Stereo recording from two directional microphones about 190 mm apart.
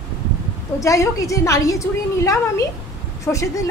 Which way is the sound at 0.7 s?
15° left (ahead or behind).